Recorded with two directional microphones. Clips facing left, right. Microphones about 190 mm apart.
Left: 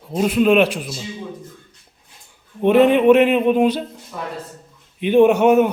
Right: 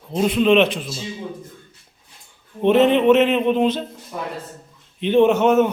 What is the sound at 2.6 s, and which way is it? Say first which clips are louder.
A man's voice: left 2 dB; 10° left (ahead or behind).